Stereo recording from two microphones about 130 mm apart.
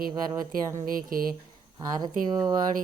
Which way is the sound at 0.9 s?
90° right.